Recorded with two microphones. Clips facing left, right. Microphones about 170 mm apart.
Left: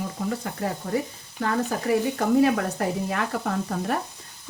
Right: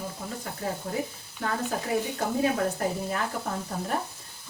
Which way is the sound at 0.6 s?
75° left (ahead or behind).